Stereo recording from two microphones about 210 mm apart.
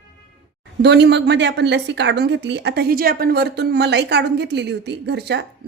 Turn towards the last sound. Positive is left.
turn(degrees=-55)  # may be behind; listen again after turning